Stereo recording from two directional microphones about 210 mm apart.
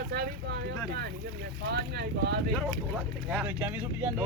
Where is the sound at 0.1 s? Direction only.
50° right (ahead or behind).